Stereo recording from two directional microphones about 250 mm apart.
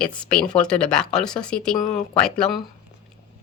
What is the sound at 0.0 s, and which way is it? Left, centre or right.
Speech, centre.